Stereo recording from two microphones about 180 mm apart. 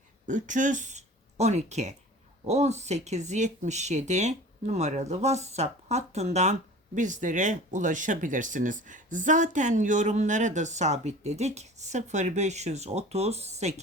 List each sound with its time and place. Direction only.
0.3 s speech: 45° right (ahead or behind)